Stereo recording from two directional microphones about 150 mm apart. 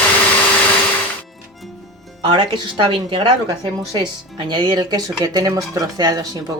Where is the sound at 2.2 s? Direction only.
30° right (ahead or behind).